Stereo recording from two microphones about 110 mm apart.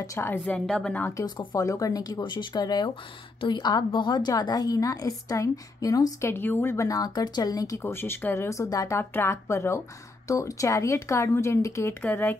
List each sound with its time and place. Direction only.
0.0 s speech: 25° left (ahead or behind)
0.7 s speech: 5° left (ahead or behind)
1.1 s a woman's voice: 40° left (ahead or behind)
6.3 s speech: 20° left (ahead or behind)